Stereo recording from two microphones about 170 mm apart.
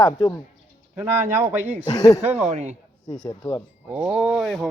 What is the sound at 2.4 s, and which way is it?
Speech, 45° right (ahead or behind).